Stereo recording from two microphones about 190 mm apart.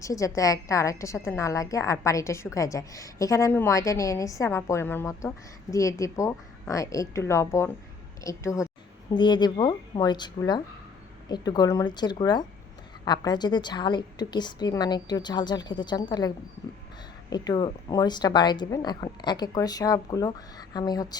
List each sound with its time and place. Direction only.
0.0 s a woman's voice: 15° left (ahead or behind)